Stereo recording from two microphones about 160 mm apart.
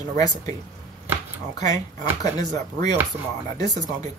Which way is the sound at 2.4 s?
50° right (ahead or behind).